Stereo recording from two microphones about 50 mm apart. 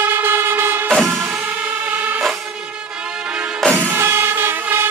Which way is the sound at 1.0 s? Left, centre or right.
Right.